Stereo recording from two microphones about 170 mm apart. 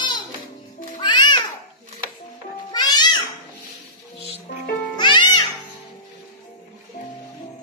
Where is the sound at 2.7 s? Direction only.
25° left (ahead or behind).